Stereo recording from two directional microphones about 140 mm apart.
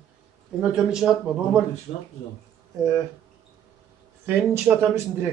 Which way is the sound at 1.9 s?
55° left (ahead or behind).